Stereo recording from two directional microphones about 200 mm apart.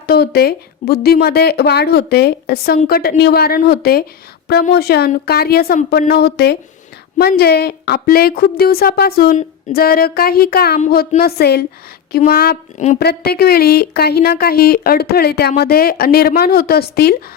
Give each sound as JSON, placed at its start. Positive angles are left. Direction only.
{"t": 0.1, "sound": "speech", "side_deg": 50}